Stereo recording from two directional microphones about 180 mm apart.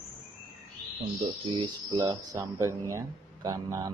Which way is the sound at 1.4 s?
25° right (ahead or behind).